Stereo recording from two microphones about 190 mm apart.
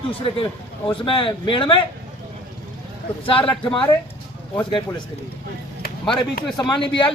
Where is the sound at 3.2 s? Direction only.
25° left (ahead or behind).